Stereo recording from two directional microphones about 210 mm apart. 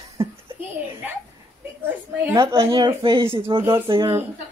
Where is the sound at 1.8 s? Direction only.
10° right (ahead or behind).